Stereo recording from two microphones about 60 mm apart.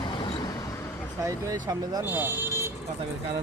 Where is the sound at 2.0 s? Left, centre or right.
Right.